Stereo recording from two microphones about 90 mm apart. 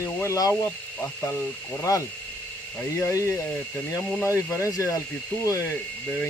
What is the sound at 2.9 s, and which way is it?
Speech, 30° left (ahead or behind).